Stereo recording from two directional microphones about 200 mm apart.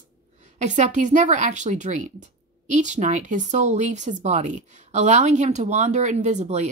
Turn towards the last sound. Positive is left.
turn(degrees=-35)  # may be behind; listen again after turning